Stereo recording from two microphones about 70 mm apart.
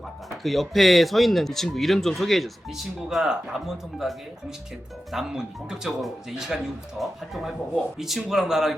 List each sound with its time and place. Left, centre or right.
0.4 s speech: centre